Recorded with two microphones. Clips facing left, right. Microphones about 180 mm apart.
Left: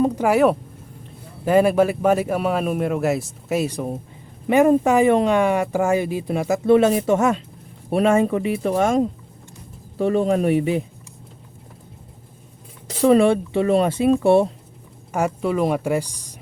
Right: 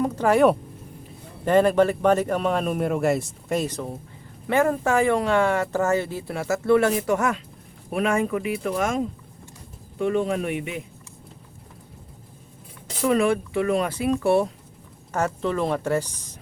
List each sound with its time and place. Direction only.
0.2 s speech: 5° left (ahead or behind); by 10.8 s 35° left (ahead or behind)
13.0 s speech: 30° left (ahead or behind)
15.1 s speech: 10° left (ahead or behind)